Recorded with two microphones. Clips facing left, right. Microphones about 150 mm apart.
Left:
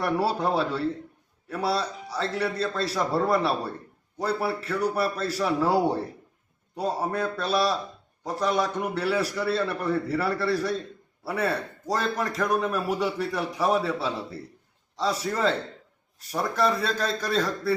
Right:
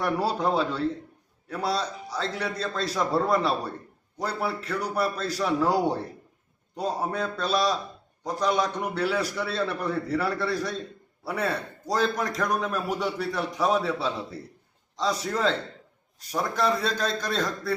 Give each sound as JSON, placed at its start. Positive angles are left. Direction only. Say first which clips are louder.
{"t": 0.0, "sound": "a man's voice", "louder": "left 1 dB", "side_deg": 5}